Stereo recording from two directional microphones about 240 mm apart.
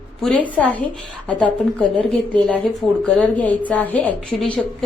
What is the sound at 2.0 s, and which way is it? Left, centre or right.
A woman's voice, centre.